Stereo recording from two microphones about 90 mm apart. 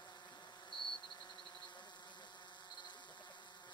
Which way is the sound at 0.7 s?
65° left (ahead or behind).